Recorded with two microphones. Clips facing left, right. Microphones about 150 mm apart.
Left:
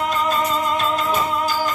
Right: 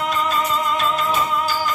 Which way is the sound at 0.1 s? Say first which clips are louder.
Left 1 dB; 40° left (ahead or behind).